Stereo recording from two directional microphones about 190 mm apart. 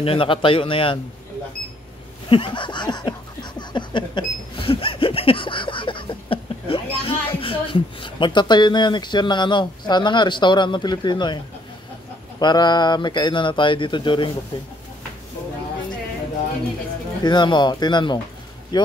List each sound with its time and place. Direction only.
0.0 s speech: 30° left (ahead or behind)
2.2 s a sound: 30° left (ahead or behind)
7.6 s speech: 25° left (ahead or behind)
12.4 s speech: 25° left (ahead or behind)
17.2 s speech: 25° left (ahead or behind)